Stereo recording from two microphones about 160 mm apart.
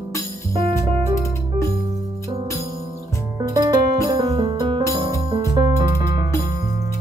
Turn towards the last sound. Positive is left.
turn(degrees=-25)  # may be behind; listen again after turning